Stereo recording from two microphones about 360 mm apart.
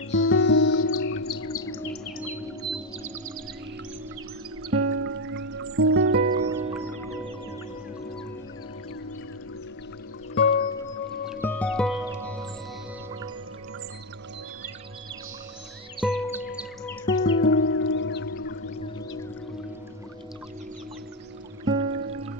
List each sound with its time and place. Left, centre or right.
0.1 s music: left
1.0 s chirp: left
4.6 s music: right
6.3 s music: centre
10.3 s music: centre
11.4 s music: centre
16.0 s music: centre
16.8 s music: centre
17.2 s music: left
21.6 s music: centre